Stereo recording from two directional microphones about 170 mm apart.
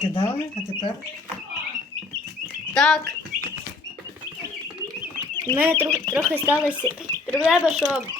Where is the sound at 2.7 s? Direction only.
5° left (ahead or behind).